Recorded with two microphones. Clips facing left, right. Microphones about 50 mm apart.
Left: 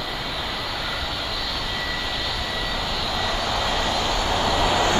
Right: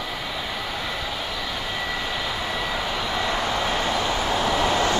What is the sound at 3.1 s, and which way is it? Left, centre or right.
Vehicle, right.